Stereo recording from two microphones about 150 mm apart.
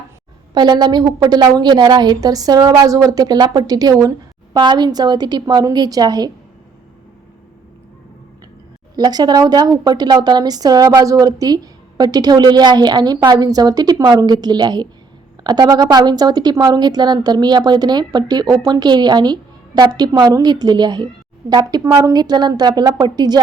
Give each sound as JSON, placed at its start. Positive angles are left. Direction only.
{"t": 0.5, "sound": "a woman's voice", "side_deg": -30}
{"t": 9.0, "sound": "a woman's voice", "side_deg": -25}